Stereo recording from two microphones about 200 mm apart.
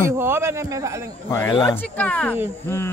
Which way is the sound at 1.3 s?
20° left (ahead or behind).